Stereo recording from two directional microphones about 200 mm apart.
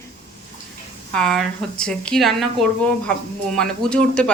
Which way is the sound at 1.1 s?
5° left (ahead or behind).